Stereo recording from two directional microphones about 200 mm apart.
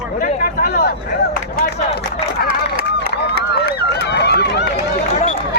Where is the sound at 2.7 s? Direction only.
55° right (ahead or behind).